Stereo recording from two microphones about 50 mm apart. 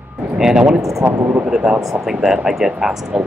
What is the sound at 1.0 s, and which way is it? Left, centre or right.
Speech, right.